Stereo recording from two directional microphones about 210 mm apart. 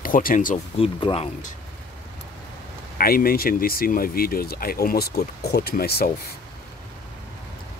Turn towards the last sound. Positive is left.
turn(degrees=45)  # may be behind; listen again after turning